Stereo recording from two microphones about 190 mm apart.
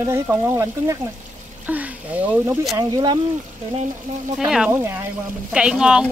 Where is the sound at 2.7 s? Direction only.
20° right (ahead or behind).